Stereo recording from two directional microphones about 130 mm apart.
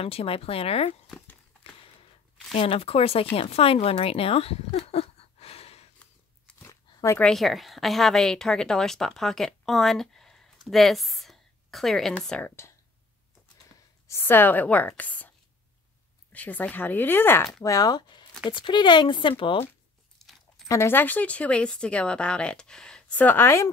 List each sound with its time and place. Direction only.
0.0 s speech: 50° left (ahead or behind)
2.5 s speech: 45° left (ahead or behind)
5.9 s a sound: 10° left (ahead or behind)
6.7 s a sound: 20° left (ahead or behind)
7.2 s a woman's voice: centre (ahead or behind)
12.4 s speech: 20° left (ahead or behind)
14.0 s speech: 20° left (ahead or behind)
17.6 s speech: 30° left (ahead or behind)
20.2 s a sound: centre (ahead or behind)
20.6 s speech: 20° left (ahead or behind)